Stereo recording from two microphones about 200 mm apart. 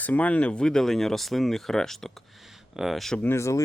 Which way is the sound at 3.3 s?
15° left (ahead or behind).